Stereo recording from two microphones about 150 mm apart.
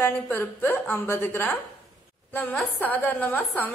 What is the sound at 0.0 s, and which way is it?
A woman's voice, 15° left (ahead or behind).